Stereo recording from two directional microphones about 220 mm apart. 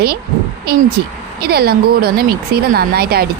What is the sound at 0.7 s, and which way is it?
Speech, 45° right (ahead or behind).